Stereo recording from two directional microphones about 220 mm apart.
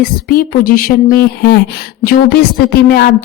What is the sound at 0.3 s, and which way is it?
Speech, 40° left (ahead or behind).